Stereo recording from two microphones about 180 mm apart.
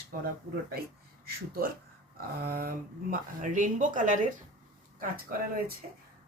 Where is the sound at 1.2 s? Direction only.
55° right (ahead or behind).